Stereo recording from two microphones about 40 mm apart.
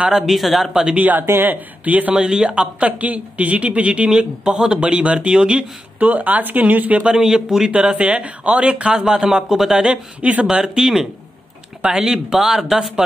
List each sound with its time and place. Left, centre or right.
0.1 s speech: centre
0.9 s speech: right
2.1 s speech: right
3.0 s speech: right
5.9 s speech: right
7.2 s speech: centre
8.0 s speech: right
8.9 s speech: centre